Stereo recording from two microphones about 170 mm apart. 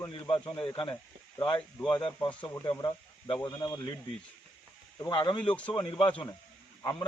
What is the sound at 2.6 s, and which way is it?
A man's voice, 25° left (ahead or behind).